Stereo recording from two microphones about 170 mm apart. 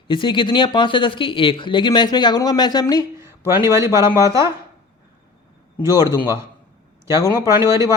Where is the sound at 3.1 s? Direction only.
15° right (ahead or behind).